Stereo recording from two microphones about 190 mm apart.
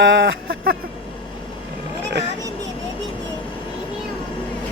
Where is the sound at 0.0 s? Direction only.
70° right (ahead or behind).